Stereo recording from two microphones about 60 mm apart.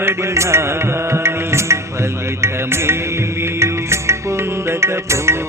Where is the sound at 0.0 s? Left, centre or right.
Right.